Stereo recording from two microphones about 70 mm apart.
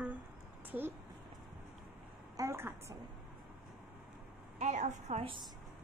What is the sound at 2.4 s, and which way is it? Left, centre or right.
Speech, right.